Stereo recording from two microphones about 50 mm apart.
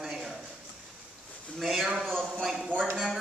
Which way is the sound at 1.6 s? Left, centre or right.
Centre.